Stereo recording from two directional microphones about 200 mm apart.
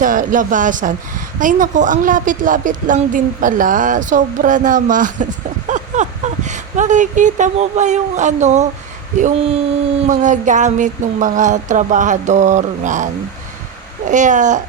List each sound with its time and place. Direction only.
0.0 s speech: 40° right (ahead or behind)